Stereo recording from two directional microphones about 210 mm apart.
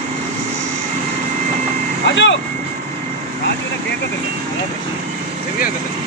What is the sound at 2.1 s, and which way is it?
Vehicle, 60° left (ahead or behind).